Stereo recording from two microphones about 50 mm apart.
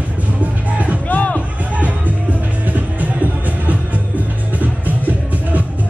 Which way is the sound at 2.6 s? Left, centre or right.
Right.